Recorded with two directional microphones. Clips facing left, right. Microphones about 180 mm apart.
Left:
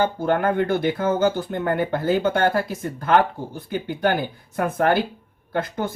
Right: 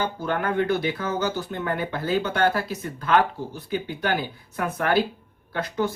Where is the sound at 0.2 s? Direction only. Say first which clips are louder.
Left 4 dB; 50° left (ahead or behind).